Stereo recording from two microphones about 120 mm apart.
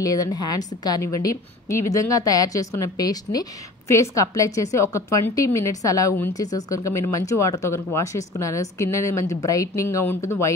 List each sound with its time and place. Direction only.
0.0 s a woman's voice: 30° left (ahead or behind)